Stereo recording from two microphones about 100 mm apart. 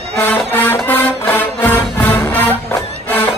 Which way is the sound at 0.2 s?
20° left (ahead or behind).